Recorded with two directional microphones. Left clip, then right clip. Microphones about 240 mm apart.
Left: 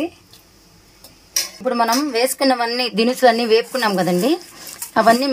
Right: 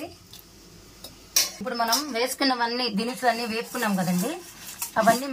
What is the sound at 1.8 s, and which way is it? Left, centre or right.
A woman's voice, left.